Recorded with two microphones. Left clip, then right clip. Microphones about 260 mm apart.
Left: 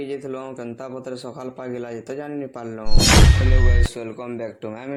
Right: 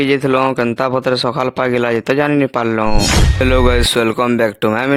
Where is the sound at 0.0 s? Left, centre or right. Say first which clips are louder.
Right 16 dB; right.